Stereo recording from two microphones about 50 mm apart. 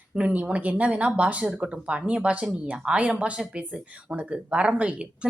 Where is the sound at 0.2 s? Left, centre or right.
Right.